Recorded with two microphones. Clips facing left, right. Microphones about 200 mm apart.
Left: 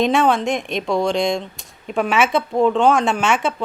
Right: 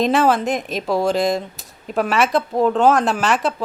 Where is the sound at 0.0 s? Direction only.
Centre (ahead or behind).